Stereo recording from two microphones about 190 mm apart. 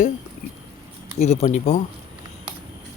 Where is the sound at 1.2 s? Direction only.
35° left (ahead or behind).